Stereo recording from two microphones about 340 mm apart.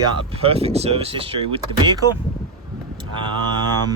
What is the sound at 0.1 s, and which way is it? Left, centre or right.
Speech, centre.